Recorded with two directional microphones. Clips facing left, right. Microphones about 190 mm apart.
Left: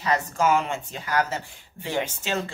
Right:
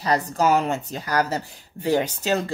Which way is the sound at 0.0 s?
35° right (ahead or behind).